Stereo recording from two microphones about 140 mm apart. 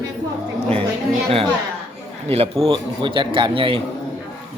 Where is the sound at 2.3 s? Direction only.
45° right (ahead or behind).